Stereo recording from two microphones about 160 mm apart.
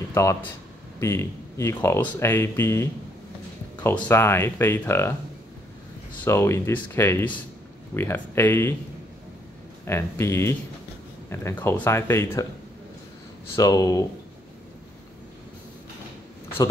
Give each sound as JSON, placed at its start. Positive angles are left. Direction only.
{"t": 0.1, "sound": "speech", "side_deg": 15}
{"t": 6.2, "sound": "speech", "side_deg": 15}
{"t": 9.8, "sound": "speech", "side_deg": 15}
{"t": 13.6, "sound": "speech", "side_deg": 20}